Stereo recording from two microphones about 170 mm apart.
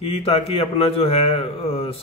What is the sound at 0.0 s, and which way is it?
A man's voice, 35° left (ahead or behind).